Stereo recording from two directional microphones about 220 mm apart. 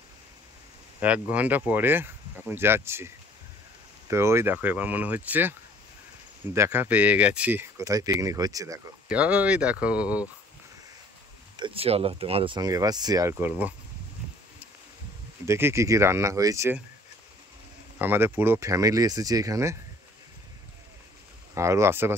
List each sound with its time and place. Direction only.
1.0 s speech: 5° right (ahead or behind)
4.1 s speech: 10° right (ahead or behind)
6.5 s speech: 10° right (ahead or behind)
11.5 s speech: 25° right (ahead or behind)
15.4 s speech: 10° right (ahead or behind)
17.9 s speech: 10° right (ahead or behind)
21.5 s speech: 15° right (ahead or behind)